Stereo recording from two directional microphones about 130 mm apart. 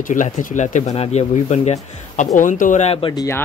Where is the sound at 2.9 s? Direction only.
45° left (ahead or behind).